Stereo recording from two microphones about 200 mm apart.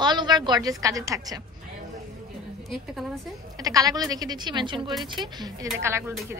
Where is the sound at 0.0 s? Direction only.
20° right (ahead or behind).